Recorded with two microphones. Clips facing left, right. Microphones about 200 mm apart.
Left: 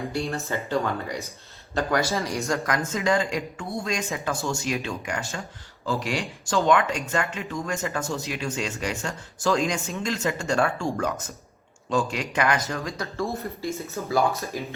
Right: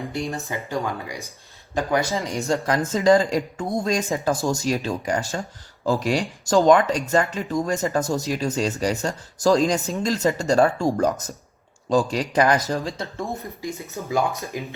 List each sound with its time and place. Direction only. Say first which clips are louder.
0.1 s speech: even; 15° right (ahead or behind)
2.5 s speech: right 7 dB; 30° right (ahead or behind)